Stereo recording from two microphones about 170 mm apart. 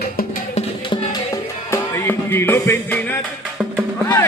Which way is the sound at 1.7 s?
15° left (ahead or behind).